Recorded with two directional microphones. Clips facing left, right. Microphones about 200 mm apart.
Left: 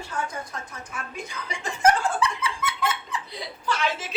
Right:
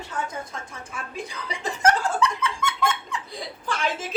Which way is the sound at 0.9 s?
30° right (ahead or behind).